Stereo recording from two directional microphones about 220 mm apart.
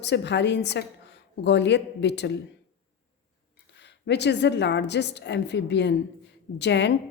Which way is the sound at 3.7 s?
50° left (ahead or behind).